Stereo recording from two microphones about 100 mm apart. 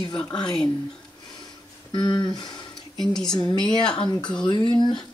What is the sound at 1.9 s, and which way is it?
Speech, 45° left (ahead or behind).